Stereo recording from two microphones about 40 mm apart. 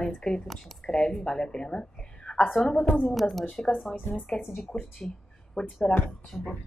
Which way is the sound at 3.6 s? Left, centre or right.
Centre.